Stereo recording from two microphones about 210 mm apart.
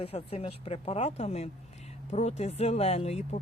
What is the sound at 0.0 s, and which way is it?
Speech, 30° left (ahead or behind).